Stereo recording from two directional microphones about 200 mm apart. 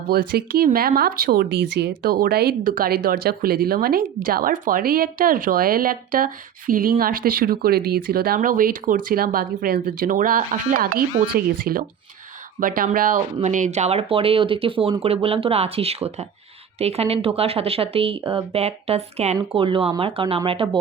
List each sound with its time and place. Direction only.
0.1 s speech: 50° right (ahead or behind); by 20.7 s 25° right (ahead or behind)